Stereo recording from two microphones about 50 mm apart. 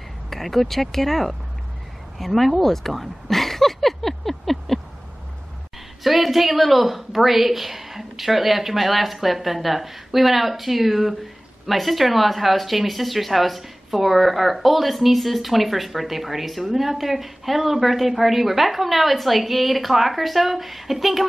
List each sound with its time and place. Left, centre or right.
0.3 s speech: centre
2.1 s a sound: centre
6.0 s speech: centre